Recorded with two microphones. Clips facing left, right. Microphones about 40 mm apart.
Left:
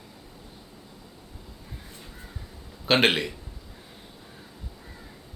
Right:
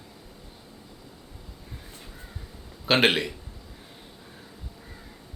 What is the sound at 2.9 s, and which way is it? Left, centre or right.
Speech, centre.